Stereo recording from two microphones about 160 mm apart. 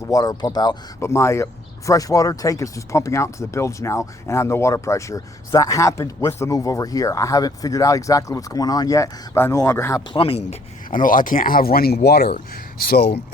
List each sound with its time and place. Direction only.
0.1 s speech: 25° left (ahead or behind)
10.1 s speech: 35° left (ahead or behind)
10.4 s speech: 55° left (ahead or behind); by 13.2 s 90° left